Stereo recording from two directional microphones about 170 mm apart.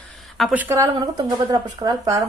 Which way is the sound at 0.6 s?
20° right (ahead or behind).